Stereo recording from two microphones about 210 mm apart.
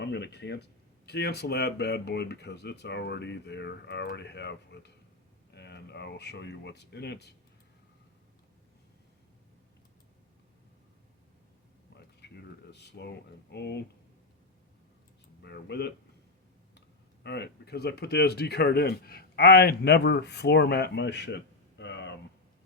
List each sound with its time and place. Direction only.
0.0 s speech: 55° left (ahead or behind)
12.2 s a sound: 50° left (ahead or behind)
12.7 s speech: 55° left (ahead or behind)
15.4 s speech: 55° left (ahead or behind)
17.2 s speech: 50° left (ahead or behind)